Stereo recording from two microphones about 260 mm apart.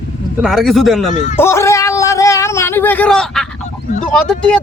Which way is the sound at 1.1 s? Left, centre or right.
Left.